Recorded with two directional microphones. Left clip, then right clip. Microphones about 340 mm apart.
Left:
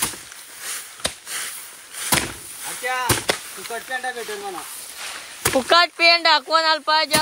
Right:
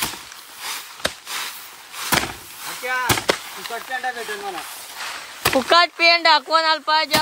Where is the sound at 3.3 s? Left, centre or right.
Right.